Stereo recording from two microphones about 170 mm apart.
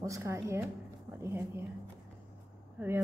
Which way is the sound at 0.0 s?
15° right (ahead or behind).